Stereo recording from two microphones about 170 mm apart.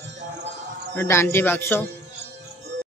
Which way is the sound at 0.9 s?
15° left (ahead or behind).